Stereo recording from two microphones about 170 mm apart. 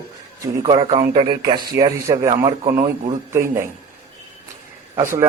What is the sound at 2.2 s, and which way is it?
Speech, 30° right (ahead or behind).